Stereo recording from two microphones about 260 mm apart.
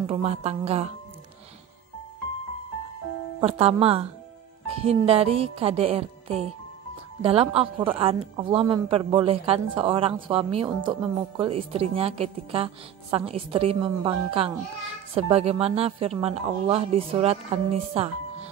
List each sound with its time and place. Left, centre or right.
0.0 s a woman's voice: right
3.3 s a woman's voice: right